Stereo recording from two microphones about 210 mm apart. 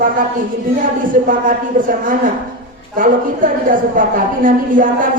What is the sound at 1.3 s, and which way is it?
A woman's voice, 40° right (ahead or behind).